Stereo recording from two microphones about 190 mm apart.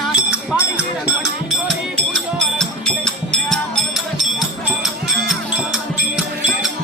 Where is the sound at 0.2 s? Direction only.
5° right (ahead or behind).